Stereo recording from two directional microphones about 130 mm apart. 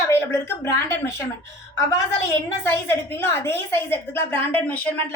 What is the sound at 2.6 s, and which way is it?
A woman's voice, 15° left (ahead or behind).